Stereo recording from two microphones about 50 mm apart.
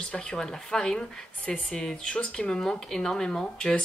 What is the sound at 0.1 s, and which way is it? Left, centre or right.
Speech, centre.